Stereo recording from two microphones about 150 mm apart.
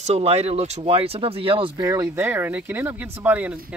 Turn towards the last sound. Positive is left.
turn(degrees=-10)  # may be behind; listen again after turning